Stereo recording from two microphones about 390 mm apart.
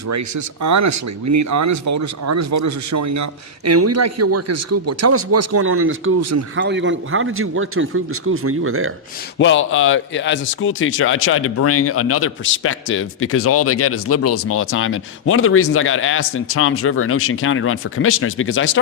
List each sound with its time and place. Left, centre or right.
0.1 s speech: right
9.4 s speech: left